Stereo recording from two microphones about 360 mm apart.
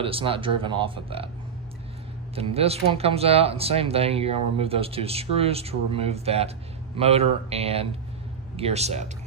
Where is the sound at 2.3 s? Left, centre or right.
Centre.